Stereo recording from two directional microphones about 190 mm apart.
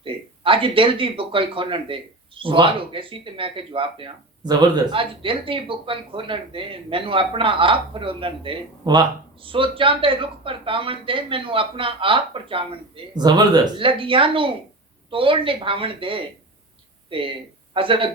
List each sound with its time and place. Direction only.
0.0 s speech: 25° right (ahead or behind)